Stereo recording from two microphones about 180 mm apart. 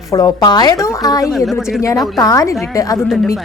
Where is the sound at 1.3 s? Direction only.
Centre (ahead or behind).